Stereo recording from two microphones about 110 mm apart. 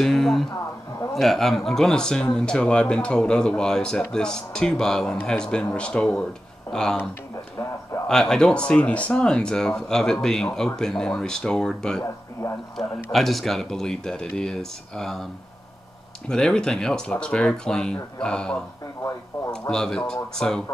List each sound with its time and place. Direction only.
0.0 s speech: centre (ahead or behind)
8.1 s speech: 5° left (ahead or behind)
12.0 s speech: 25° left (ahead or behind)
12.7 s speech: centre (ahead or behind)
16.3 s speech: 5° left (ahead or behind)
19.7 s speech: 5° left (ahead or behind)